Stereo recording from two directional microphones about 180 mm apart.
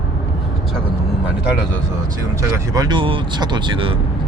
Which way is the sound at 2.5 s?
25° right (ahead or behind).